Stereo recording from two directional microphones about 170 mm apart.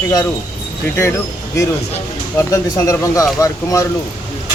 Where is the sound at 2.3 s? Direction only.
15° left (ahead or behind).